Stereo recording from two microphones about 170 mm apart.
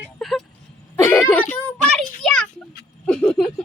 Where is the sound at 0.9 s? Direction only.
15° left (ahead or behind).